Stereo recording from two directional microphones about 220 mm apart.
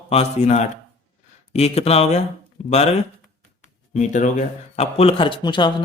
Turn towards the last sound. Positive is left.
turn(degrees=20)  # may be behind; listen again after turning